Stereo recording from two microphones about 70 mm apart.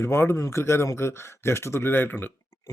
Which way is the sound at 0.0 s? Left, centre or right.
Left.